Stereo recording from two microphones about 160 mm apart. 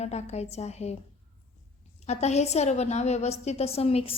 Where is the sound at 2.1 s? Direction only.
45° left (ahead or behind).